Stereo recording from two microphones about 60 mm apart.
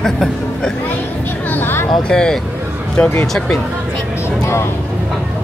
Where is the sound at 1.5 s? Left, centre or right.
Left.